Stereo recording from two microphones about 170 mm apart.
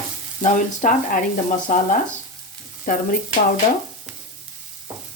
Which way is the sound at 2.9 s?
50° left (ahead or behind).